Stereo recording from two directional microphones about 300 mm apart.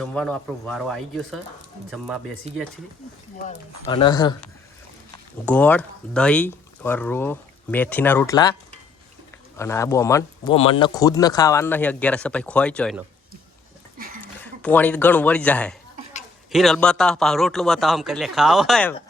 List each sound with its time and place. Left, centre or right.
0.0 s speech: centre
2.5 s speech: centre
3.8 s speech: centre
5.5 s speech: centre
9.6 s speech: centre
14.4 s speech: centre